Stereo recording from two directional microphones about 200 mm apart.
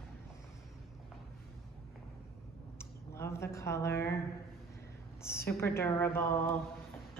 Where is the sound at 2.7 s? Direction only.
15° left (ahead or behind).